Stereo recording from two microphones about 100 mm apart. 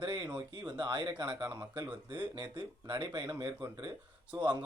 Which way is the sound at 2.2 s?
50° right (ahead or behind).